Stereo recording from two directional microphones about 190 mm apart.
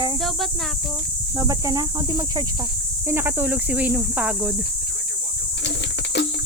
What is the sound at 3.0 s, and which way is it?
Speech, 10° right (ahead or behind).